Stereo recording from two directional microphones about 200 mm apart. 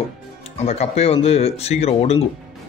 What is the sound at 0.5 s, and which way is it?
Speech, 30° left (ahead or behind).